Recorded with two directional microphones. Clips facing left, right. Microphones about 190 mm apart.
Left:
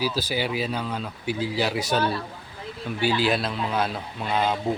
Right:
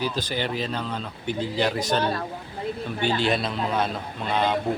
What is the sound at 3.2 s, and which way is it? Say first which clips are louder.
Speech: even; centre (ahead or behind).